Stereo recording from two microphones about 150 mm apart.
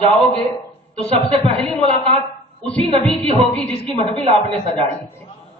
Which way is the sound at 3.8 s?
40° right (ahead or behind).